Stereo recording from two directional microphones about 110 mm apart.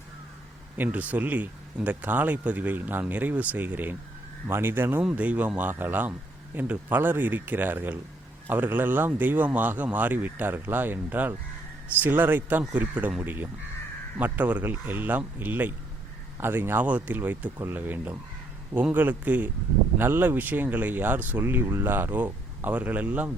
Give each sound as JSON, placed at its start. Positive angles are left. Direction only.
{"t": 0.8, "sound": "speech", "side_deg": -15}